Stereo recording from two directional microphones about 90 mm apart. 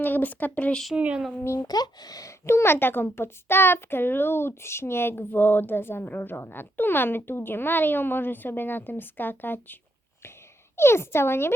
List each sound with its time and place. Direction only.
0.0 s a child's voice: 20° left (ahead or behind)
0.9 s speech: 15° right (ahead or behind)
1.6 s speech: 50° left (ahead or behind)
2.5 s a child's voice: 30° left (ahead or behind)
10.8 s a child's voice: 30° left (ahead or behind)